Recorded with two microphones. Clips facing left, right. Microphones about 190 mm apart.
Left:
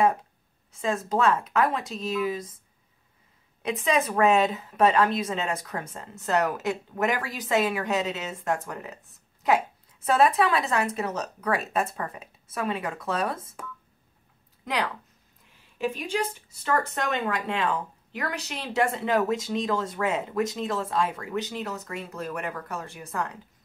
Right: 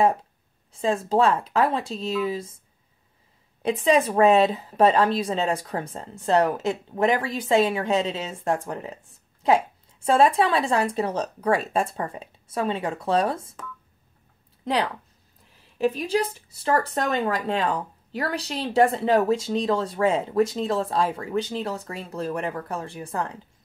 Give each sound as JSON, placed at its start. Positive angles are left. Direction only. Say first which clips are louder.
{"t": 0.7, "sound": "speech", "louder": "right 4 dB", "side_deg": -30}
{"t": 3.6, "sound": "a woman's voice", "louder": "right 5 dB", "side_deg": -30}
{"t": 14.6, "sound": "speech", "louder": "right 4 dB", "side_deg": -30}